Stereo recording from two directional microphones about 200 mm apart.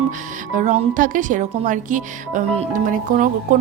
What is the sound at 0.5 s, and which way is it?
A woman's voice, 40° right (ahead or behind).